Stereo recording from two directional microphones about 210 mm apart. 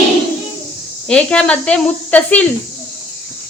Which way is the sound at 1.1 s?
5° left (ahead or behind).